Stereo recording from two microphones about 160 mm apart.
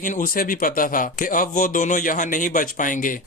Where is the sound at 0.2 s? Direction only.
60° left (ahead or behind).